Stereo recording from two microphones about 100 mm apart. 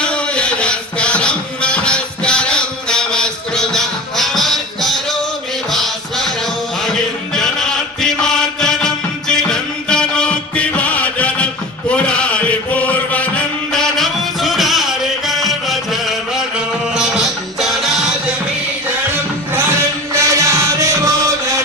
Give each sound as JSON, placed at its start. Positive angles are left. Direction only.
{"t": 0.0, "sound": "a sound", "side_deg": 10}
{"t": 5.7, "sound": "music", "side_deg": 0}
{"t": 11.9, "sound": "chant", "side_deg": 10}
{"t": 20.1, "sound": "music", "side_deg": -30}